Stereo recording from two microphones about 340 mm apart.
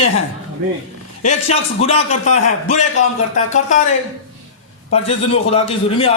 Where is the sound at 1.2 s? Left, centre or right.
Centre.